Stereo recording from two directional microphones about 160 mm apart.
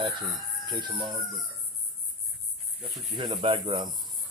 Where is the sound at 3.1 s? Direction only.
30° right (ahead or behind).